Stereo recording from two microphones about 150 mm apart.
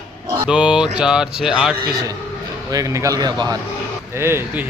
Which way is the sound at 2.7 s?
20° right (ahead or behind).